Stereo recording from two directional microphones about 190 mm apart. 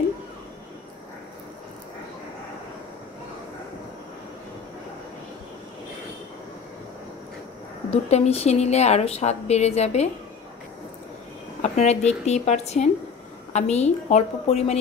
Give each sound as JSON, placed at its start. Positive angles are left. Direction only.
{"t": 7.9, "sound": "a woman's voice", "side_deg": 35}
{"t": 11.6, "sound": "a woman's voice", "side_deg": 35}